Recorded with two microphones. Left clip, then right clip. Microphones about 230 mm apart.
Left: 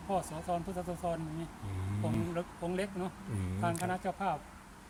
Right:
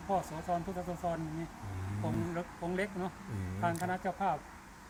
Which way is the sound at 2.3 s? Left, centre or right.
Centre.